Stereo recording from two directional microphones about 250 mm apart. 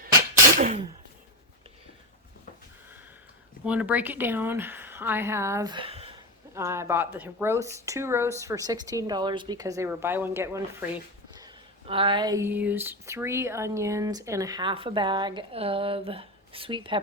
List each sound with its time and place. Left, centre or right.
0.5 s a sound: right
3.7 s speech: centre; by 6.1 s right
6.5 s speech: centre